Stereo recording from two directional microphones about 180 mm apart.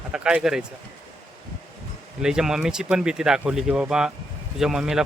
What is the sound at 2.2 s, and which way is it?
Speech, 5° right (ahead or behind).